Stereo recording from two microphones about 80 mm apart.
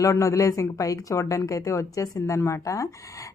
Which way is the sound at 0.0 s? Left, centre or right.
Left.